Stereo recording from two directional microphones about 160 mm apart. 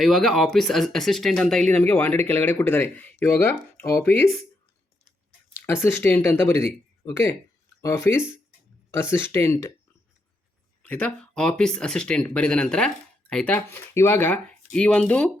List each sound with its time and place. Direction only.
0.0 s speech: centre (ahead or behind); by 4.1 s 15° left (ahead or behind)
5.6 s speech: 15° left (ahead or behind)
10.8 s speech: 10° left (ahead or behind)